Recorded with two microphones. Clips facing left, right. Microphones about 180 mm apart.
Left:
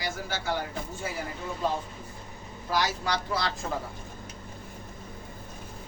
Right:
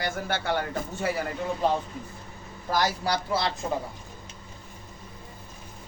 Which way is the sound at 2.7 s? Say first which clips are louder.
Right 2 dB; 40° right (ahead or behind).